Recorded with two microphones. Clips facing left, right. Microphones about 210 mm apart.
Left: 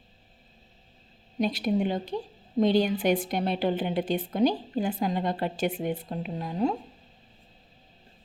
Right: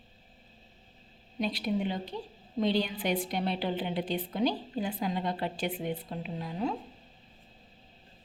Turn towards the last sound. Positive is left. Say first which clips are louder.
# left 5 dB
turn(degrees=45)  # may be behind; listen again after turning